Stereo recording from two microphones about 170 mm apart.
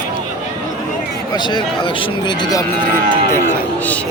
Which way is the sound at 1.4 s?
25° left (ahead or behind).